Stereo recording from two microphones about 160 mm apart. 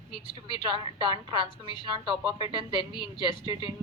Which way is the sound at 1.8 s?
30° right (ahead or behind).